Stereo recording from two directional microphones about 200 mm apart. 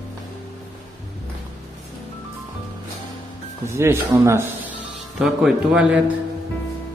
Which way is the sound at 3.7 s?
15° right (ahead or behind).